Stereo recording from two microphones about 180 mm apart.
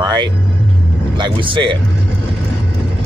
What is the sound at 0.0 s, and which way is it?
Speech, 25° right (ahead or behind).